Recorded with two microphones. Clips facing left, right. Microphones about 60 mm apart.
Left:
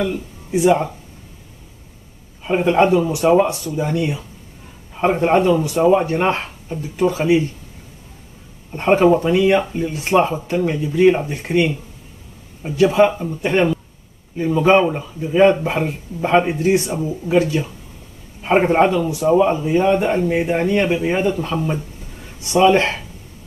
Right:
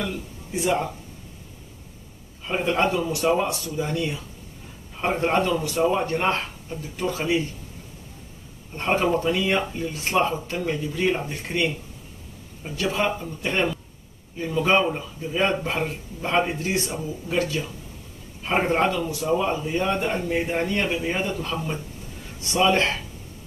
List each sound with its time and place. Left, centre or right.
0.0 s speech: left
2.4 s speech: left
8.7 s speech: left